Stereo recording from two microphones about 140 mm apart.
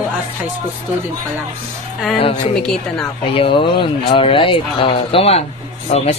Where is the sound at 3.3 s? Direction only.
40° left (ahead or behind).